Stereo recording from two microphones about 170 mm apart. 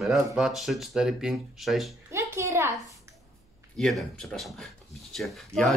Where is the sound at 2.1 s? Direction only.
15° right (ahead or behind).